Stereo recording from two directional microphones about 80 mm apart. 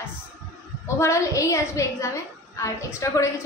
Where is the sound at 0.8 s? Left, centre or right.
Left.